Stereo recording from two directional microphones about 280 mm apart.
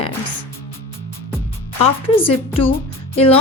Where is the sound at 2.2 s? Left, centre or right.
Centre.